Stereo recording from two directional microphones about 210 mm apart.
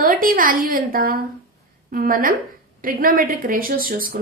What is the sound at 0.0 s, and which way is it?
A woman's voice, 40° right (ahead or behind).